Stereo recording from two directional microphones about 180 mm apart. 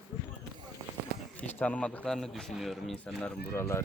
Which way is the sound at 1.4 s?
10° left (ahead or behind).